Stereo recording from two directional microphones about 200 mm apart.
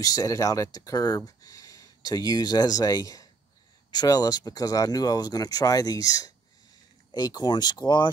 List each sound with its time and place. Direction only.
0.0 s speech: 15° left (ahead or behind)